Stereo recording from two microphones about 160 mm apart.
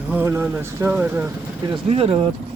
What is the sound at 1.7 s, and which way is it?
Speech, 35° right (ahead or behind).